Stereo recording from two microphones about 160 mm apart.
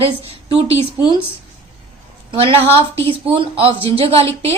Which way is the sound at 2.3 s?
30° right (ahead or behind).